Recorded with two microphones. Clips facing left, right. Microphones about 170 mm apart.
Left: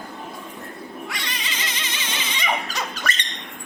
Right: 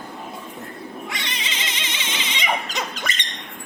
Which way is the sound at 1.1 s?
20° right (ahead or behind).